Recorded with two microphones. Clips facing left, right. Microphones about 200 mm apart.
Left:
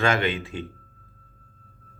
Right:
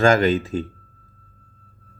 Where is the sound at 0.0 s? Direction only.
40° right (ahead or behind).